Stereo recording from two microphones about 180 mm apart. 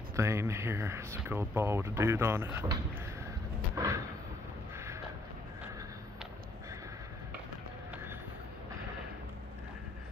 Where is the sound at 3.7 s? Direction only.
15° right (ahead or behind).